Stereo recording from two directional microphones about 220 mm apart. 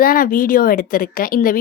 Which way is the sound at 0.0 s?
40° left (ahead or behind).